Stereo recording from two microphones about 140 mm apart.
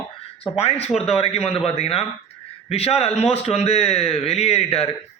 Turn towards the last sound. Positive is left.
turn(degrees=45)  # may be behind; listen again after turning